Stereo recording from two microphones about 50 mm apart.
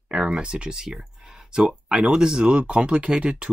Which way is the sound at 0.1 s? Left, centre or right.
Right.